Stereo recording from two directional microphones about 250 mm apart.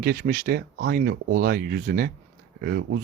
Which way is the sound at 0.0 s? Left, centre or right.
Right.